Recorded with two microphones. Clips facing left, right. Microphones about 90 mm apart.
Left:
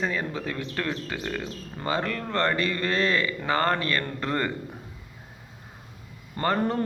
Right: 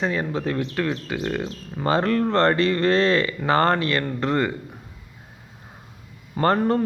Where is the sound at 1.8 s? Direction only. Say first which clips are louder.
Right 8 dB; 35° right (ahead or behind).